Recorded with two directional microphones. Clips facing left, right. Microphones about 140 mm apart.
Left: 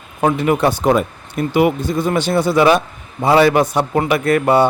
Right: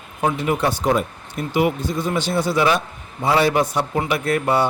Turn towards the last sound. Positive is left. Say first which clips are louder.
# left 6 dB
turn(degrees=60)  # may be behind; listen again after turning